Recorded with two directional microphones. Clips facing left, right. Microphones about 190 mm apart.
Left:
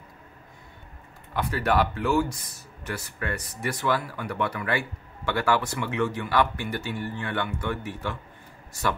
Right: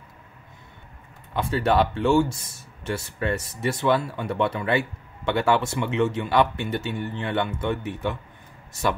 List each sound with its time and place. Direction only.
1.3 s speech: 25° right (ahead or behind)